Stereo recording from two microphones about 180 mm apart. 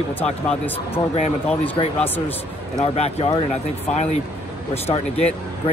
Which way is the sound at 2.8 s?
35° left (ahead or behind).